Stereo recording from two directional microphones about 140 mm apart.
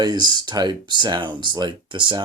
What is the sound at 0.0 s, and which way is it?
Speech, 30° right (ahead or behind).